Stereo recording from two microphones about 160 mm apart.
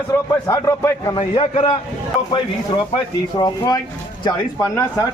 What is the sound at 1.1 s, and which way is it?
Speech, 35° left (ahead or behind).